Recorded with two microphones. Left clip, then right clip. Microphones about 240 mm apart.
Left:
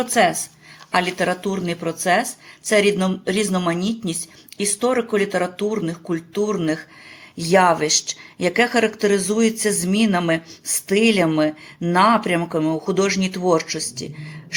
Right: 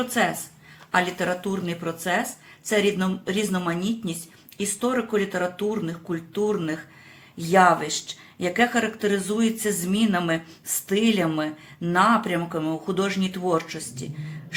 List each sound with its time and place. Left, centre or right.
0.9 s speech: left